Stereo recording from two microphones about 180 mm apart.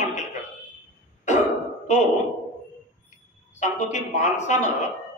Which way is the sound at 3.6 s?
40° left (ahead or behind).